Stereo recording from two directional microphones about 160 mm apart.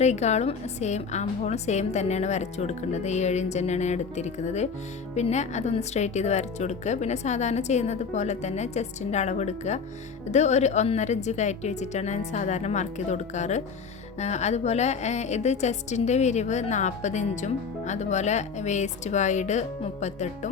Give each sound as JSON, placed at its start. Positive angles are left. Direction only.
{"t": 0.0, "sound": "a woman's voice", "side_deg": 45}